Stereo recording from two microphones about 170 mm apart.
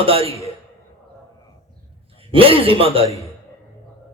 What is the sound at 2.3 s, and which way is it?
Music, 30° right (ahead or behind).